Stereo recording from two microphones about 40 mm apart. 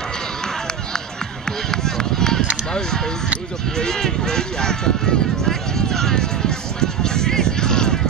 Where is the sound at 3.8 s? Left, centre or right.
Centre.